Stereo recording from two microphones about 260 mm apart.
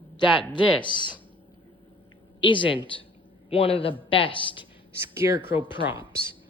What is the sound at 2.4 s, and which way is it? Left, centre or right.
Speech, centre.